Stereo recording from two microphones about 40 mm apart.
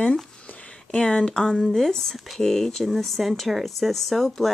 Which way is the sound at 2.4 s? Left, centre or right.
Centre.